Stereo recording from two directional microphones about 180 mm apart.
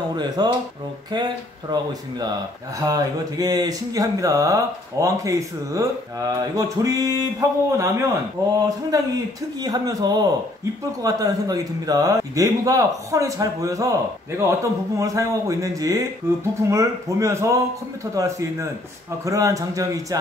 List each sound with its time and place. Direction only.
0.1 s speech: 25° right (ahead or behind)